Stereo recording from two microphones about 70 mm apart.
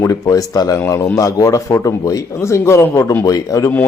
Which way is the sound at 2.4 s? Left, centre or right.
Left.